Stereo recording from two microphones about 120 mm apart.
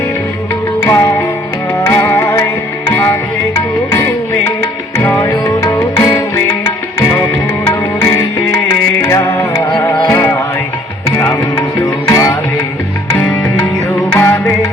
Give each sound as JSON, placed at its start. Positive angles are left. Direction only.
{"t": 0.9, "sound": "music", "side_deg": 25}
{"t": 7.7, "sound": "music", "side_deg": 20}
{"t": 14.1, "sound": "music", "side_deg": 15}